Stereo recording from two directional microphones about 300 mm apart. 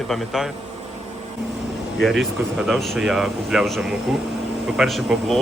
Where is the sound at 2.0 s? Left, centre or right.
Centre.